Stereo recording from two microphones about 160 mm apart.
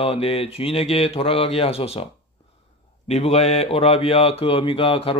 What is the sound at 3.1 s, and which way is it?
Speech, 40° left (ahead or behind).